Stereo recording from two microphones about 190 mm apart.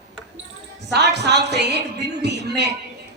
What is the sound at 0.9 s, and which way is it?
Speech, 60° right (ahead or behind).